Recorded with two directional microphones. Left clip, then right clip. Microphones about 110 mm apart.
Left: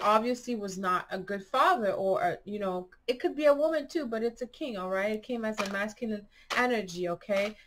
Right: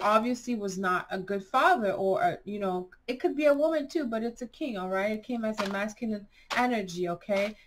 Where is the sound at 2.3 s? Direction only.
20° left (ahead or behind).